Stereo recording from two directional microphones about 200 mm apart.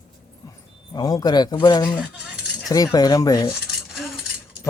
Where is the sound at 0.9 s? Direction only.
20° left (ahead or behind).